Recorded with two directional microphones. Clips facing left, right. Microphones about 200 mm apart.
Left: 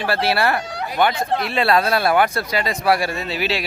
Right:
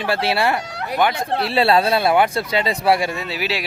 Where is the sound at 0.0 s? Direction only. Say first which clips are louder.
Even; 20° right (ahead or behind).